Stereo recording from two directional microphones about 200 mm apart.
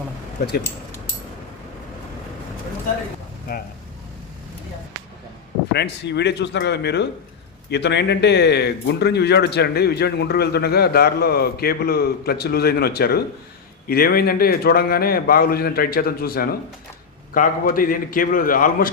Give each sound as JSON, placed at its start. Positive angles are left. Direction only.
{"t": 5.7, "sound": "speech", "side_deg": 60}